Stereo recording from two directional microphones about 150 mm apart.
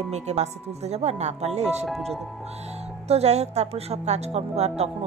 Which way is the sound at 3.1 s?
45° right (ahead or behind).